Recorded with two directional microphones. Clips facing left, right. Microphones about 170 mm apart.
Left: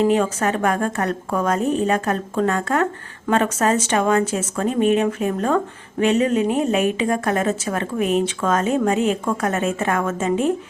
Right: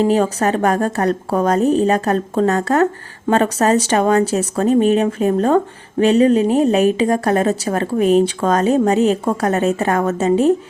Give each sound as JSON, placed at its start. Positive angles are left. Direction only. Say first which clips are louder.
{"t": 0.0, "sound": "a woman's voice", "louder": "right 3 dB", "side_deg": -35}